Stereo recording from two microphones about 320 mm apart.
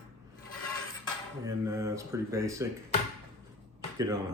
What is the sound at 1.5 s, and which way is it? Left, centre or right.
Speech, centre.